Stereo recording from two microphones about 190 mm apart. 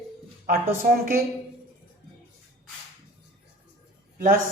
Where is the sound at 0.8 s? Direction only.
50° right (ahead or behind).